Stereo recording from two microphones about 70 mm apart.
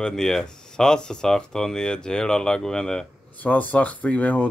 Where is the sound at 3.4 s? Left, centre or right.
Left.